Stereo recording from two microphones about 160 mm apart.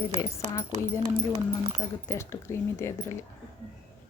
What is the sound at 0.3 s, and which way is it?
Speech, 20° left (ahead or behind).